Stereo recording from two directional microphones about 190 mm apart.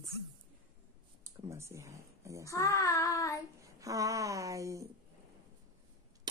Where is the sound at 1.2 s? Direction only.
15° right (ahead or behind).